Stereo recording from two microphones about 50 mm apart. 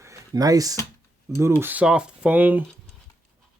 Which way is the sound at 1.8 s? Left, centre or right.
Centre.